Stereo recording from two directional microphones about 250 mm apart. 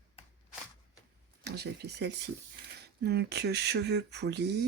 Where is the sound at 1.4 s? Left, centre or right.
Right.